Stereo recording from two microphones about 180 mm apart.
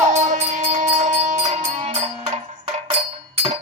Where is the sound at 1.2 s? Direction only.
40° right (ahead or behind).